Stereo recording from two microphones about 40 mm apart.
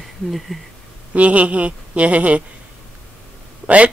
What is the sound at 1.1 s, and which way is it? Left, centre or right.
Speech, right.